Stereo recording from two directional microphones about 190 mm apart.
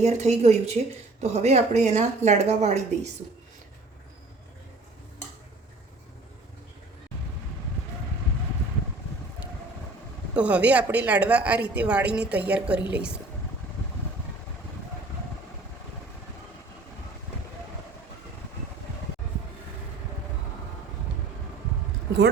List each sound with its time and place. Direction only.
0.0 s speech: 35° right (ahead or behind)
10.3 s a woman's voice: 5° right (ahead or behind)